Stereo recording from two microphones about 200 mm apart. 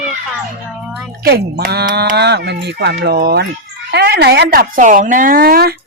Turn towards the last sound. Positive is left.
turn(degrees=-50)  # may be behind; listen again after turning